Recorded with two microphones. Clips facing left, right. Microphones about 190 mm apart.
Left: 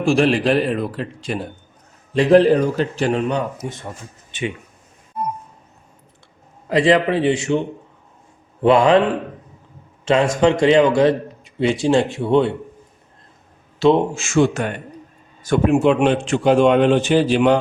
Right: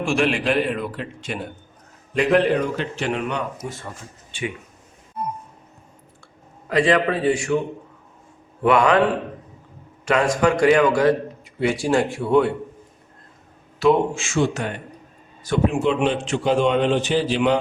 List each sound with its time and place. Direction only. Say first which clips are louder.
0.0 s speech: left 5 dB; 35° left (ahead or behind)
6.7 s a man's voice: left 3 dB; 25° left (ahead or behind)
8.6 s a man's voice: left 4 dB; 25° left (ahead or behind)
10.1 s a man's voice: left 3 dB; 25° left (ahead or behind)
13.8 s a man's voice: left 2 dB; 25° left (ahead or behind)
14.2 s a man's voice: left 5 dB; 50° left (ahead or behind)